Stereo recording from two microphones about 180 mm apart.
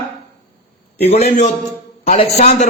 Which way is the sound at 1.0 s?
35° left (ahead or behind).